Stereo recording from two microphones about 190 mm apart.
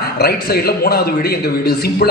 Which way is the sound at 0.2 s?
55° left (ahead or behind).